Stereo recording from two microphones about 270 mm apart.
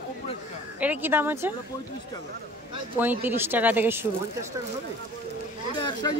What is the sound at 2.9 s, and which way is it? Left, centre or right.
Speech, centre.